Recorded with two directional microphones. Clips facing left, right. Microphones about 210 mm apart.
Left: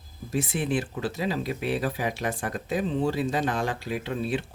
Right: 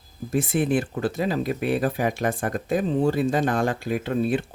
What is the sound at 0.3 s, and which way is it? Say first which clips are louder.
Speech: right 5 dB; 50° right (ahead or behind).